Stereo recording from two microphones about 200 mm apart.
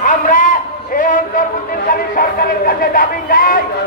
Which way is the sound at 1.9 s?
45° left (ahead or behind).